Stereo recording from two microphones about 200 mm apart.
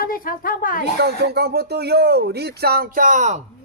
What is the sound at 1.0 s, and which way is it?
Speech, 55° right (ahead or behind).